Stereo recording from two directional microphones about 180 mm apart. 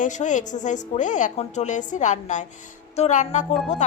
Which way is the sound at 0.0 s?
45° left (ahead or behind).